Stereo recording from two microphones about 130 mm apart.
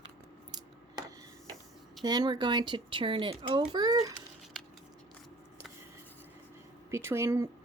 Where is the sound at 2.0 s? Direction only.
30° right (ahead or behind).